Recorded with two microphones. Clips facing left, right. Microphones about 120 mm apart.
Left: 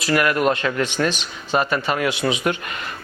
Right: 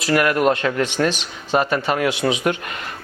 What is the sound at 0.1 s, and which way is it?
Speech, 50° right (ahead or behind).